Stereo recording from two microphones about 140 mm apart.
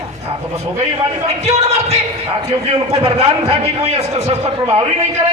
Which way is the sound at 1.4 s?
50° right (ahead or behind).